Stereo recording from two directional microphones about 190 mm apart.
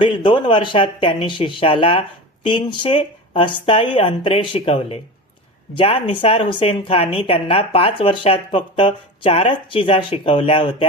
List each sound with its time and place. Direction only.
0.0 s speech: 25° left (ahead or behind)